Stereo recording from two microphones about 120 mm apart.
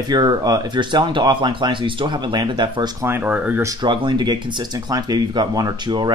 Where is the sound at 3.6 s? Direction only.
35° right (ahead or behind).